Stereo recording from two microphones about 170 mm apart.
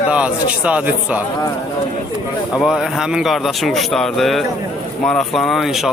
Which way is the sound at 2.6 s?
Centre (ahead or behind).